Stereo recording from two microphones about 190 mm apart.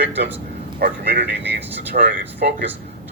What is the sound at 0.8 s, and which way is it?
Speech, 55° right (ahead or behind).